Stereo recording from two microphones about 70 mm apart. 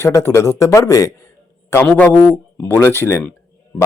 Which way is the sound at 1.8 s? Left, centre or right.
Left.